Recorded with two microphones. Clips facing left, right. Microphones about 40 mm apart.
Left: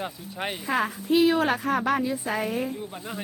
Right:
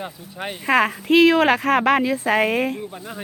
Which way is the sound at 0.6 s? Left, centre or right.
Right.